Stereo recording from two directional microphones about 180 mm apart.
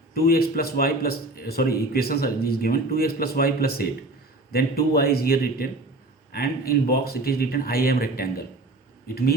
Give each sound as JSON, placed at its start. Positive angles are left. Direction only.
{"t": 0.1, "sound": "a man's voice", "side_deg": 55}